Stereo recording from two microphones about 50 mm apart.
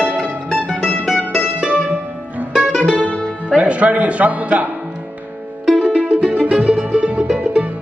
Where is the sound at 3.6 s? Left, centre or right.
Right.